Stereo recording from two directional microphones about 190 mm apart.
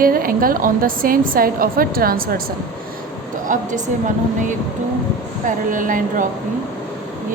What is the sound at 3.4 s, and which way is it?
Speech, 45° right (ahead or behind).